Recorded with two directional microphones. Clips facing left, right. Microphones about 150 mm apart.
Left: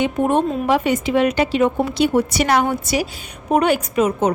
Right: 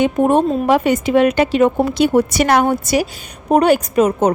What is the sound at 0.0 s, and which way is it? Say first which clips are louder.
A woman's voice: right 4 dB; 40° right (ahead or behind).